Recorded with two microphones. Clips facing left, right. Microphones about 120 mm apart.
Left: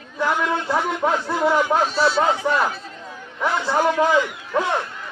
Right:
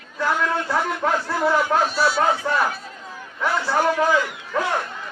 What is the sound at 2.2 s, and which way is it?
A man's voice, 15° left (ahead or behind).